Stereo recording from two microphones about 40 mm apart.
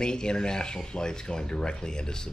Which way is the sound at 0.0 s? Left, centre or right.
Left.